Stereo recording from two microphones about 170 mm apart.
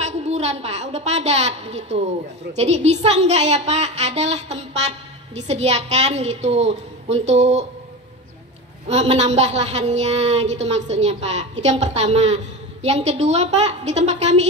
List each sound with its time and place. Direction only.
0.0 s a woman's voice: 40° right (ahead or behind)
8.8 s a woman's voice: 40° right (ahead or behind)